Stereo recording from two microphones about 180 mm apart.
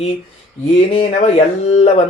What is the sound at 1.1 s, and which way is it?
Speech, 40° left (ahead or behind).